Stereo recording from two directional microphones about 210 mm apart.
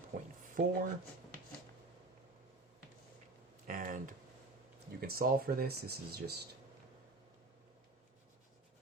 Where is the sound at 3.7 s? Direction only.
40° right (ahead or behind).